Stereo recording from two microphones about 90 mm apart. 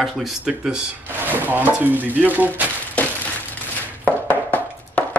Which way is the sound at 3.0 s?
15° left (ahead or behind).